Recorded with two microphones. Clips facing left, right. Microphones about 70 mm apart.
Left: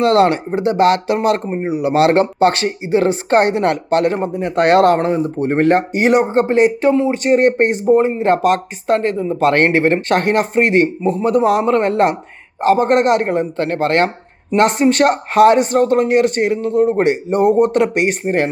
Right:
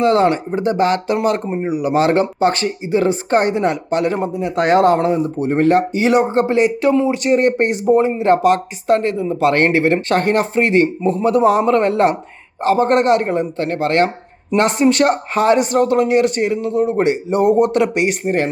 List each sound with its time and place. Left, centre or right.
0.0 s speech: left
4.9 s speech: left